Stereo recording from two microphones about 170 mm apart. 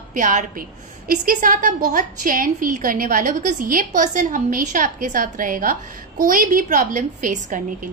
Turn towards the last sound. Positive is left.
turn(degrees=-50)  # may be behind; listen again after turning